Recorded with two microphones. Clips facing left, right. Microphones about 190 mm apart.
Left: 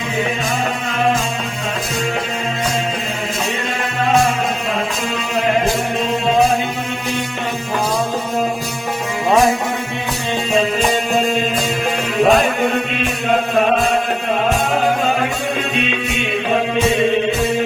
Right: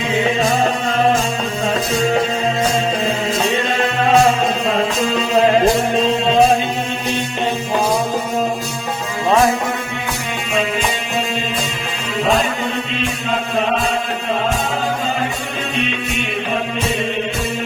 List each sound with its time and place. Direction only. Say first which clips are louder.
4.1 s music: right 2 dB; 30° right (ahead or behind)
10.5 s music: left 3 dB; 45° left (ahead or behind)
12.2 s music: left 4 dB; 55° left (ahead or behind)